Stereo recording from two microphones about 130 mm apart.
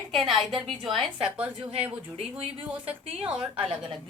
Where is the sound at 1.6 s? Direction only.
50° right (ahead or behind).